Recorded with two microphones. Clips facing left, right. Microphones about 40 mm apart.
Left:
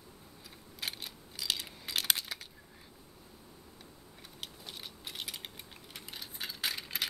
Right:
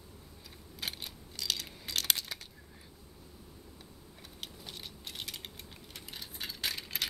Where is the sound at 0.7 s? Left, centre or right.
Centre.